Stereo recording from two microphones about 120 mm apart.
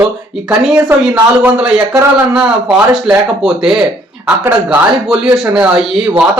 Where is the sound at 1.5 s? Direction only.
5° right (ahead or behind).